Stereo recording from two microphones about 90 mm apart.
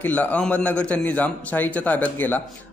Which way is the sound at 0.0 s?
20° left (ahead or behind).